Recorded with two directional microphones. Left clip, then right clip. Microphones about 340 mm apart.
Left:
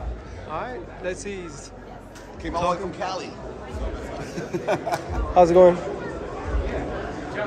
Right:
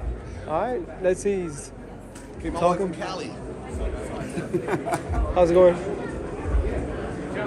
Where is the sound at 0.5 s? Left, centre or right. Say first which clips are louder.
Right 6 dB; centre.